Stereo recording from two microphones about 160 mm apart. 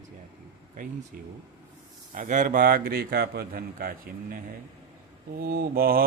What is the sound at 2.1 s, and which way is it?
Mantra, 55° right (ahead or behind).